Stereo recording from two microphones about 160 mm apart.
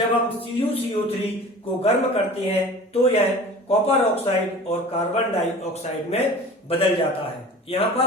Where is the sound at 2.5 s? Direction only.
40° left (ahead or behind).